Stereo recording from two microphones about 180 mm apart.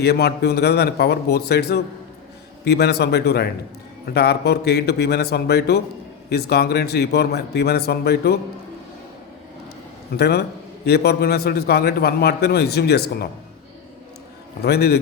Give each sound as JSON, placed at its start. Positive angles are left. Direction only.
{"t": 0.0, "sound": "a man's voice", "side_deg": 65}
{"t": 10.2, "sound": "a man's voice", "side_deg": 65}
{"t": 14.6, "sound": "a man's voice", "side_deg": 65}